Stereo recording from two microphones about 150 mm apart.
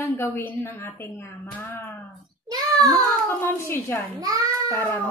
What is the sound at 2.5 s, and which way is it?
Speech, 25° right (ahead or behind).